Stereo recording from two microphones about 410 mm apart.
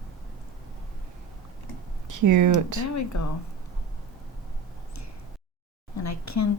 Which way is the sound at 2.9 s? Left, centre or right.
Left.